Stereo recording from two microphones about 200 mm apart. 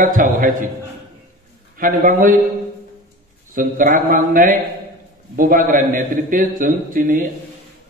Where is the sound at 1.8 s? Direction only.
45° right (ahead or behind).